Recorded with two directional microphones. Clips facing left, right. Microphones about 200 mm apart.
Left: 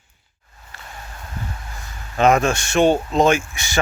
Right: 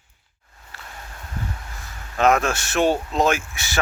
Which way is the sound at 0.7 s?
Centre (ahead or behind).